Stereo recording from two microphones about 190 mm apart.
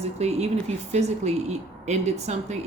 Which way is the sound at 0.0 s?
35° right (ahead or behind).